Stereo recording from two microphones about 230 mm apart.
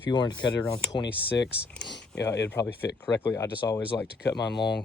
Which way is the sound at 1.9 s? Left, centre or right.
Left.